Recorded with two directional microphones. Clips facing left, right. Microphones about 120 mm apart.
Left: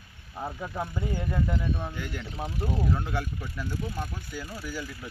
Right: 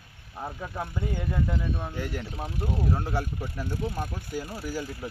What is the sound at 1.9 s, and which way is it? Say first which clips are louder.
Speech: right 3 dB; 40° right (ahead or behind).